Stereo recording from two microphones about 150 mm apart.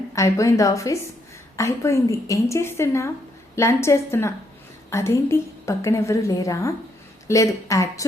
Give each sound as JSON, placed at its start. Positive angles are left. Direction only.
{"t": 0.1, "sound": "a woman's voice", "side_deg": 20}